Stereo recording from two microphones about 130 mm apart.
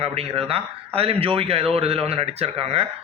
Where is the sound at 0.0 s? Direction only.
50° right (ahead or behind).